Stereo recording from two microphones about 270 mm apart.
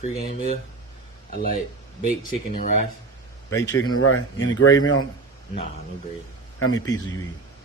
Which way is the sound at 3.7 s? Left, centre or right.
Left.